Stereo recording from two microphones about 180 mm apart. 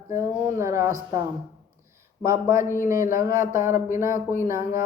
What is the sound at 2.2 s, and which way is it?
Speech, 15° right (ahead or behind).